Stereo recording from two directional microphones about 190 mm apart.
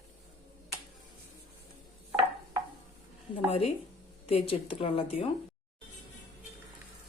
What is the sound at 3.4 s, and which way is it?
Speech, 30° left (ahead or behind).